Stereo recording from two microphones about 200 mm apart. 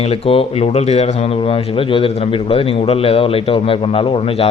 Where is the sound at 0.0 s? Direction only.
30° left (ahead or behind).